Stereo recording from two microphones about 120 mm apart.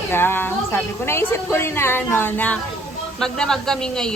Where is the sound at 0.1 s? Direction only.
20° left (ahead or behind).